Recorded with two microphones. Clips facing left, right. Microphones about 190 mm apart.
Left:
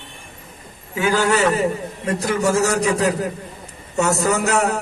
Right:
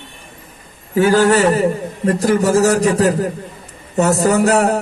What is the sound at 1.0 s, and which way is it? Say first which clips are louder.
A man's voice: right 6 dB; 35° right (ahead or behind).